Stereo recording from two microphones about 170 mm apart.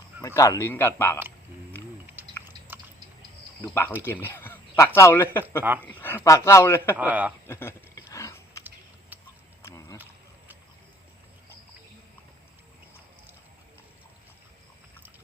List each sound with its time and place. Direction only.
0.2 s speech: 20° left (ahead or behind)
2.2 s chewing: 10° right (ahead or behind)
3.6 s speech: 10° left (ahead or behind)
6.9 s speech: 10° right (ahead or behind)
7.4 s a sound: 15° left (ahead or behind)
9.6 s a sound: 20° left (ahead or behind)